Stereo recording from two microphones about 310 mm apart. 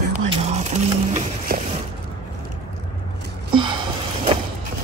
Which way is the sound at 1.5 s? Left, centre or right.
Right.